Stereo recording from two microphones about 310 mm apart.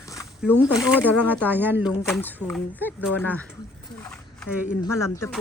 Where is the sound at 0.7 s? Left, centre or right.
Centre.